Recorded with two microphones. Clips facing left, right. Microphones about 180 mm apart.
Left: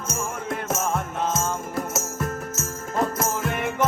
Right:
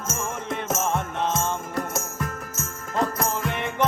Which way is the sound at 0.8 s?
Centre (ahead or behind).